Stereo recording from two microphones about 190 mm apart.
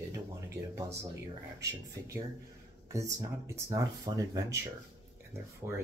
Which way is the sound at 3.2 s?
20° right (ahead or behind).